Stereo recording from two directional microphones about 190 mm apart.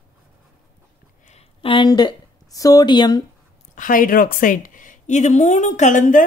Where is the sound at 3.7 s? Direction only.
45° left (ahead or behind).